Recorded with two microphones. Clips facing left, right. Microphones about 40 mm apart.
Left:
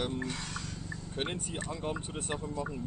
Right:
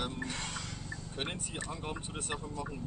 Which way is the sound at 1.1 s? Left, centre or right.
Centre.